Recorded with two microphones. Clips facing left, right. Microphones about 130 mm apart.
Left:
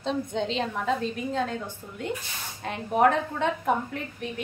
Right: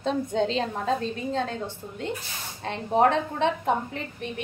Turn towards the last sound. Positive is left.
turn(degrees=-25)  # may be behind; listen again after turning